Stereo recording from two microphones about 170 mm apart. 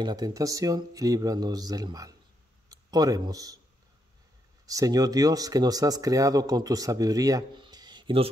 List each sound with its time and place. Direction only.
0.0 s speech: 25° right (ahead or behind)
4.6 s speech: 20° right (ahead or behind)